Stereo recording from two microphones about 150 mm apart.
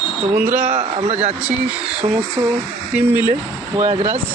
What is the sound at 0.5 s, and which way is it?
Speech, 55° right (ahead or behind).